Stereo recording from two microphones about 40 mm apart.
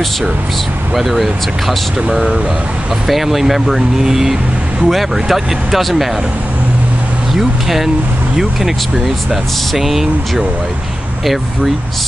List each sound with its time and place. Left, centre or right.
0.9 s speech: centre
2.0 s speech: right
3.1 s speech: centre
7.3 s speech: centre